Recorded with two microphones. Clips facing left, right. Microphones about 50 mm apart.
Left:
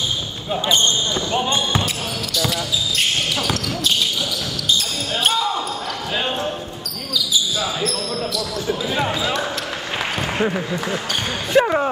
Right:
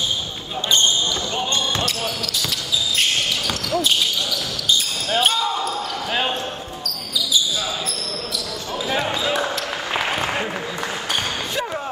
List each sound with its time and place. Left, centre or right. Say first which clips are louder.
1.3 s speech: left 6 dB; centre
3.0 s speech: left 1 dB; centre
5.1 s speech: even; centre
8.9 s speech: right 1 dB; centre
9.9 s applause: right 2 dB; centre
11.5 s basketball bounce: left 15 dB; left